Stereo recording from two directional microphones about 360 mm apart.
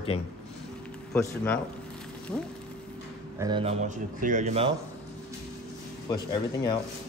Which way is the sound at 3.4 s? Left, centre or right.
Centre.